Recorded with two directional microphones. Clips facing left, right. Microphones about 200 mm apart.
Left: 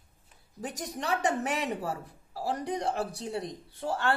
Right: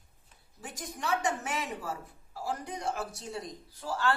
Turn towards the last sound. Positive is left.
turn(degrees=60)  # may be behind; listen again after turning